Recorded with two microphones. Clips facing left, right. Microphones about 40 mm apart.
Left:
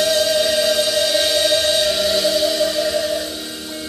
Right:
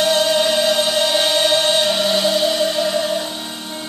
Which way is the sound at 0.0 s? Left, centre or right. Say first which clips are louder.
Right 1 dB; centre.